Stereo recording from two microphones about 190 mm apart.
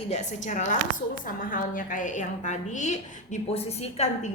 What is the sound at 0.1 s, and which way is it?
A woman's voice, 40° left (ahead or behind).